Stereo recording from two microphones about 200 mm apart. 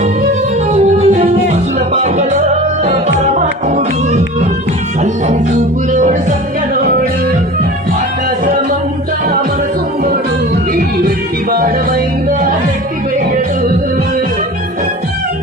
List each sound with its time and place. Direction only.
0.7 s music: 30° right (ahead or behind)
5.3 s music: 35° right (ahead or behind)